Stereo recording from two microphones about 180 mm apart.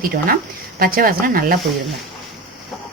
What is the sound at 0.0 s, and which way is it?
A woman's voice, 55° right (ahead or behind).